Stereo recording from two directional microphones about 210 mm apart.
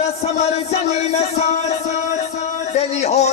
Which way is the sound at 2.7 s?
30° left (ahead or behind).